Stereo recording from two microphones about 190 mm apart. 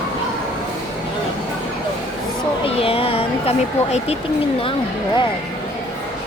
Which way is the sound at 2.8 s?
30° left (ahead or behind).